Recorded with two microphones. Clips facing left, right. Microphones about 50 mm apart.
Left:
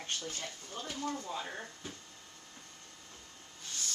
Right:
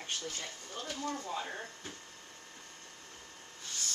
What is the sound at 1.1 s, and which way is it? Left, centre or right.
Speech, centre.